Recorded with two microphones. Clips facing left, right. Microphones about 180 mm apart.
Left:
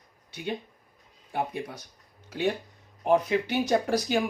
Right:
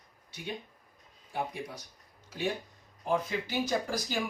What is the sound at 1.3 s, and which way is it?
Speech, 60° left (ahead or behind).